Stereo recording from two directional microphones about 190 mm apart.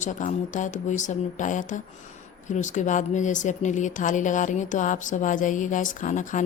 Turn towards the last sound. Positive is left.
turn(degrees=40)  # may be behind; listen again after turning